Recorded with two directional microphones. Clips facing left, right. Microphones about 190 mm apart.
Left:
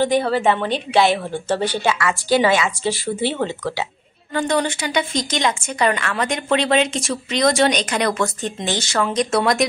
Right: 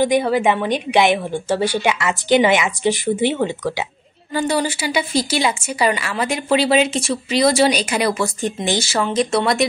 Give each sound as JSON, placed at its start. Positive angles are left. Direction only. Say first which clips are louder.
{"t": 0.0, "sound": "speech", "louder": "right 1 dB", "side_deg": -15}